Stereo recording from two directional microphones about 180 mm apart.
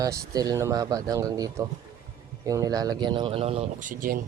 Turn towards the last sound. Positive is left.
turn(degrees=-50)  # may be behind; listen again after turning